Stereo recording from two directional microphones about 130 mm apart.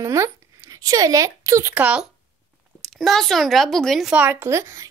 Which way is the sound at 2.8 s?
Centre (ahead or behind).